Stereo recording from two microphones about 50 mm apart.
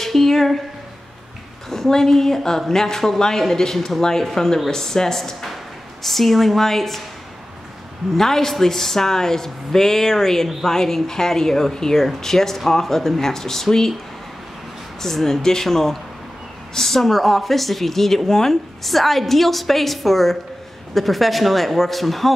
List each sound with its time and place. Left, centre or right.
0.0 s a sound: centre
1.7 s a woman's voice: centre
8.2 s speech: centre
15.0 s a woman's voice: centre